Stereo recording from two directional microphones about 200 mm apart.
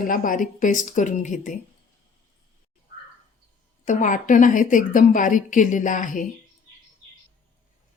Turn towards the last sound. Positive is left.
turn(degrees=40)  # may be behind; listen again after turning